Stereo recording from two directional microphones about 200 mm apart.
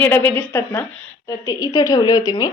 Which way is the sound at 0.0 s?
10° left (ahead or behind).